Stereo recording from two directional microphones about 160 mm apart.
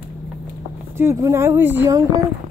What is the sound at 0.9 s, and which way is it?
Speech, 20° right (ahead or behind).